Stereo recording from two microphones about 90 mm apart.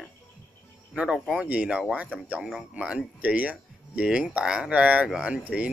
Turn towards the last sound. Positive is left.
turn(degrees=-10)  # may be behind; listen again after turning